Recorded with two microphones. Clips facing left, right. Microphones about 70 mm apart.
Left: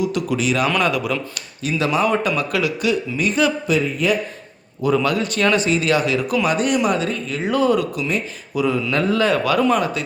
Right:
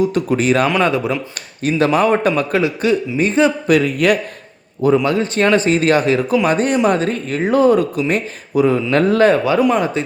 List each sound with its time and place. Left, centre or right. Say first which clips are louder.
0.0 s speech: right 5 dB; right
0.8 s a man's voice: right 4 dB; right
1.6 s speech: right 5 dB; right
3.7 s a man's voice: right 5 dB; right
5.0 s speech: right 3 dB; right
9.7 s a man's voice: right 3 dB; right